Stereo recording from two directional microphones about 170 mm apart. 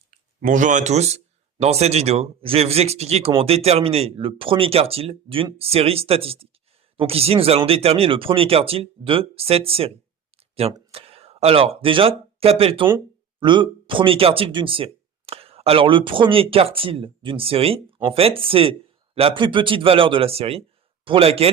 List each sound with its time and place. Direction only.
0.4 s speech: 50° right (ahead or behind)